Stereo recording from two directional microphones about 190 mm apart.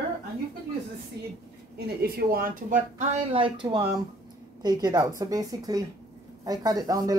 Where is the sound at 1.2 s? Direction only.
60° right (ahead or behind); by 3.0 s 45° right (ahead or behind).